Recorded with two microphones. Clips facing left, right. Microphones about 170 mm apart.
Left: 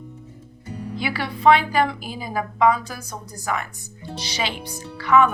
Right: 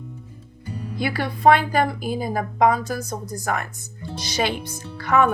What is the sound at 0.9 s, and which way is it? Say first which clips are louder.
A woman's voice: right 3 dB; 45° right (ahead or behind).